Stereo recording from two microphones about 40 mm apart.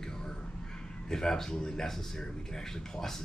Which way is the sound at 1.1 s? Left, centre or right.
Centre.